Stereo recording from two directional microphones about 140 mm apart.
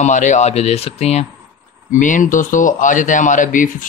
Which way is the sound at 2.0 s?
65° left (ahead or behind).